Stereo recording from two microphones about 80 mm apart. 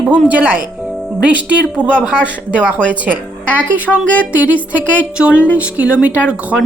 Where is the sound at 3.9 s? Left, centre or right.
Centre.